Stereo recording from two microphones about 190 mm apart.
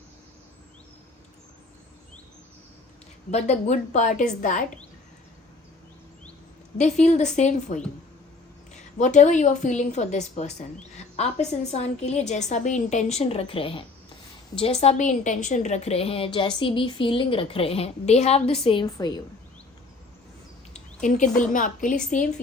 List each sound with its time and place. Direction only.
3.3 s a woman's voice: 35° left (ahead or behind)
6.7 s a woman's voice: 35° left (ahead or behind); by 19.2 s 20° left (ahead or behind)
20.7 s a woman's voice: 40° left (ahead or behind)